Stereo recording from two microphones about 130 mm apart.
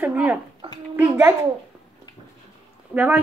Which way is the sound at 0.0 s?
10° right (ahead or behind).